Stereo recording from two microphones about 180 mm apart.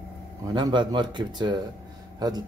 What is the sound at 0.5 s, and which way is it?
Speech, 25° right (ahead or behind).